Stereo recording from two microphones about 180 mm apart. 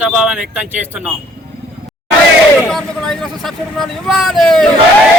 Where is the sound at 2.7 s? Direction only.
5° left (ahead or behind).